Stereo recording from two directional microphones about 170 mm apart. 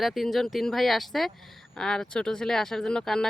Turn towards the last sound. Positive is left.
turn(degrees=5)  # may be behind; listen again after turning